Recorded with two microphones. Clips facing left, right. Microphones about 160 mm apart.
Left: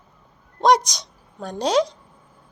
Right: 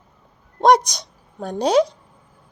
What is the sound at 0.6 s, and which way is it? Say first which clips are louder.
Speech: right 2 dB; 55° right (ahead or behind).